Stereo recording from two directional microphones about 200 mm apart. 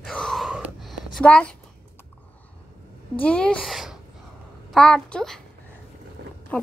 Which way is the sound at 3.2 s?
5° left (ahead or behind).